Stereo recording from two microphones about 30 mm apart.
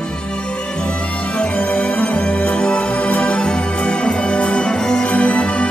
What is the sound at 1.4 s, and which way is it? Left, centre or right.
Music, left.